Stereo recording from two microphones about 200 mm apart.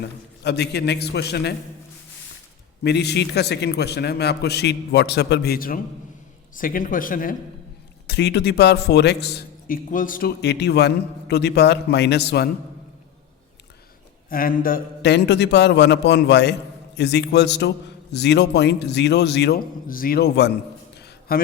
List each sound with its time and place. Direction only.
0.0 s a man's voice: 55° left (ahead or behind)
2.8 s a man's voice: 55° left (ahead or behind)
8.0 s a man's voice: 55° left (ahead or behind)
14.3 s a man's voice: 45° left (ahead or behind)
21.0 s a sound: 50° left (ahead or behind)